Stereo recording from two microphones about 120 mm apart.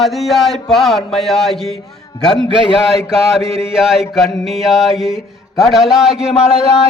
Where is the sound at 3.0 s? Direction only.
5° right (ahead or behind).